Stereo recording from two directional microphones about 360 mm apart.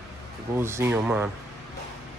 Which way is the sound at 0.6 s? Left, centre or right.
Centre.